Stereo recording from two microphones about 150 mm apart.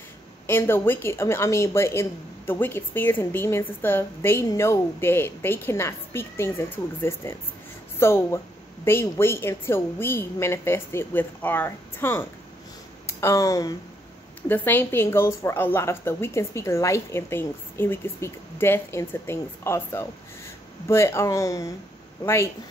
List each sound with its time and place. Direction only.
0.5 s speech: 15° left (ahead or behind)
14.5 s speech: 15° left (ahead or behind)